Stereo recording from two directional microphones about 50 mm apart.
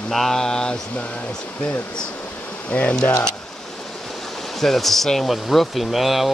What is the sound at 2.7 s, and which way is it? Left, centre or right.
Speech, left.